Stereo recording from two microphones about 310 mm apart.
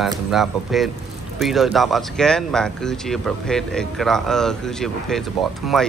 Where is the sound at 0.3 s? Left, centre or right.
Centre.